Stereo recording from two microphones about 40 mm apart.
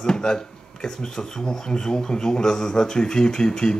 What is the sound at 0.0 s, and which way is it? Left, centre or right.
Speech, centre.